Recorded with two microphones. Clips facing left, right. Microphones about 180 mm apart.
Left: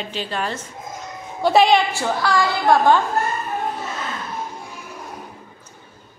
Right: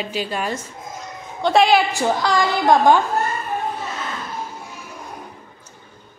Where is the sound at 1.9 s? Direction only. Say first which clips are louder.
Right 2 dB; 15° right (ahead or behind).